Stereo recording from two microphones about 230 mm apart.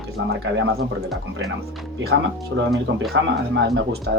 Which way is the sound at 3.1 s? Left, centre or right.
Right.